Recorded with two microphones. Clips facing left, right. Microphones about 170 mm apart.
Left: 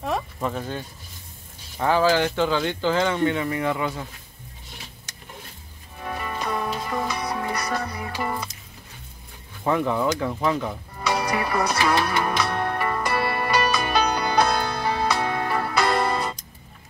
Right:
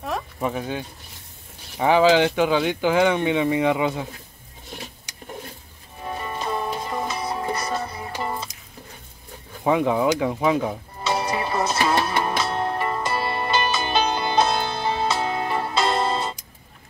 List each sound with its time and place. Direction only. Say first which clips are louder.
0.4 s speech: right 2 dB; 10° right (ahead or behind)
5.1 s a sound: right 3 dB; 15° right (ahead or behind)
6.0 s music: right 1 dB; 25° right (ahead or behind)
9.7 s music: right 3 dB; 15° right (ahead or behind)